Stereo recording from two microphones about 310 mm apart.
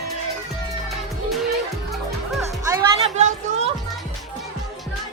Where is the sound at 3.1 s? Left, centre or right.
Right.